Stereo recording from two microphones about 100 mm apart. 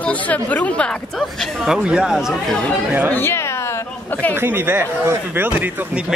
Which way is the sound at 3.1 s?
25° left (ahead or behind).